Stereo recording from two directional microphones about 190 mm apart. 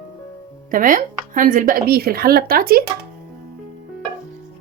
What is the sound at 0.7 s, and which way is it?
Speech, 45° right (ahead or behind).